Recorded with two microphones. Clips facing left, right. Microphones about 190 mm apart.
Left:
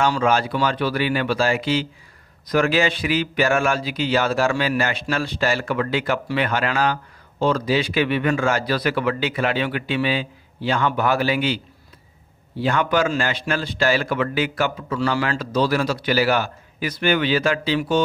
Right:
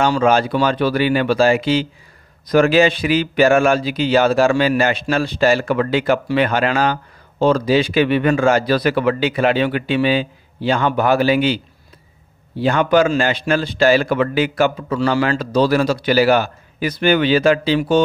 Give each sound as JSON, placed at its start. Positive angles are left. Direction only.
{"t": 0.0, "sound": "a man's voice", "side_deg": -25}
{"t": 12.6, "sound": "a man's voice", "side_deg": -30}